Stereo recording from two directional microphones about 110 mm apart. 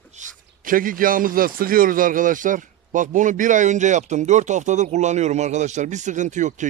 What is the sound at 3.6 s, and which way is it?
Speech, 90° right.